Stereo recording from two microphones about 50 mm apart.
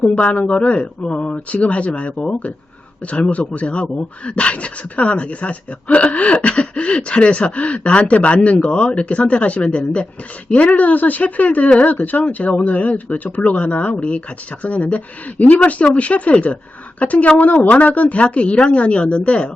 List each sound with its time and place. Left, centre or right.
0.2 s speech: left